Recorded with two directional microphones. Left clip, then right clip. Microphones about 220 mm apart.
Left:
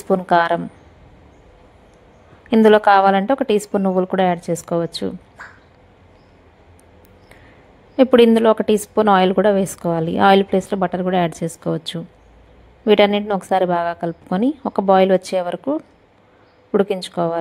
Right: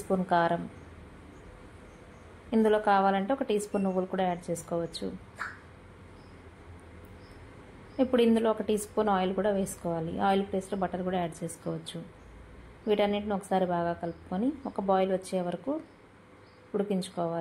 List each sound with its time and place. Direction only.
0.1 s a woman's voice: 45° left (ahead or behind)
2.5 s a woman's voice: 45° left (ahead or behind)
8.0 s a woman's voice: 45° left (ahead or behind)